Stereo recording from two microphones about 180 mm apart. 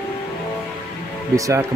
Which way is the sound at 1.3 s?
20° right (ahead or behind).